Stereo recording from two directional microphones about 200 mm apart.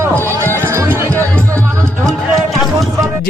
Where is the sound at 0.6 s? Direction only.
15° right (ahead or behind).